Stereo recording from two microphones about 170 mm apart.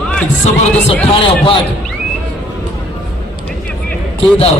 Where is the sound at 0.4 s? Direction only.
40° left (ahead or behind).